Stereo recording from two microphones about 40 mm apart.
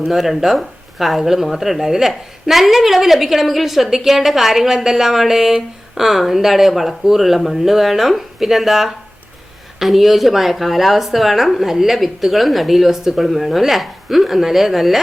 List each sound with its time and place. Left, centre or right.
0.1 s speech: centre